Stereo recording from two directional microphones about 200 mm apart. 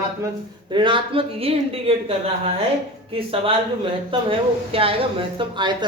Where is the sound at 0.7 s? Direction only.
25° right (ahead or behind).